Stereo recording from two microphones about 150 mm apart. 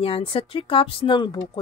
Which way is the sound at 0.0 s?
40° left (ahead or behind).